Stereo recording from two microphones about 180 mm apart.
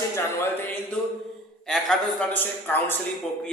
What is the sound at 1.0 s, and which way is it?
A man's voice, 5° left (ahead or behind).